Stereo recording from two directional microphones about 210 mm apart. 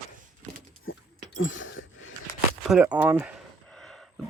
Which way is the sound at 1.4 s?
65° left (ahead or behind).